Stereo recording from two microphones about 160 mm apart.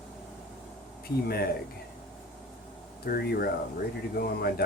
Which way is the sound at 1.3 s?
75° left (ahead or behind).